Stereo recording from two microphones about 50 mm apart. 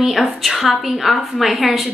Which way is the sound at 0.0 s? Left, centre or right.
Centre.